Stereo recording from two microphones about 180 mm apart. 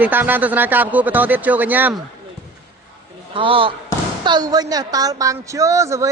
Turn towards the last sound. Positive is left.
turn(degrees=-15)  # may be behind; listen again after turning